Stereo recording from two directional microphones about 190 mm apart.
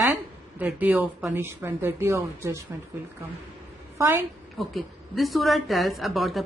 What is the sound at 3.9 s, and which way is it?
Speech, 10° right (ahead or behind).